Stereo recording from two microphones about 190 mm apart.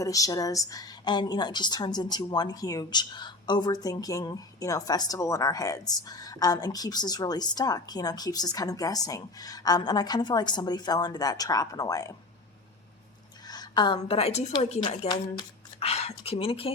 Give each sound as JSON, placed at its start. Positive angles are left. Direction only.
{"t": 0.0, "sound": "a woman's voice", "side_deg": 15}
{"t": 13.5, "sound": "a woman's voice", "side_deg": 20}